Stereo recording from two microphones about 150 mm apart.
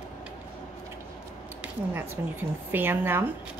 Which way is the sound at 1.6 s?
15° right (ahead or behind).